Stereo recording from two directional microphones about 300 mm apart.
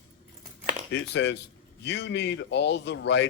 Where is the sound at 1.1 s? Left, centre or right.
Left.